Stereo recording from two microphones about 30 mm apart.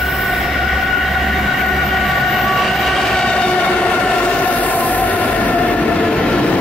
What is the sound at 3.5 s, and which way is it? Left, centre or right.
Train, left.